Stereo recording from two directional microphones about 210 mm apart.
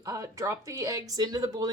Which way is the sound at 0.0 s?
15° right (ahead or behind).